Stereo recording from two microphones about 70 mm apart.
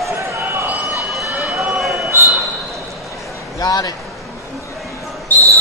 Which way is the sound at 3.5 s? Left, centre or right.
Left.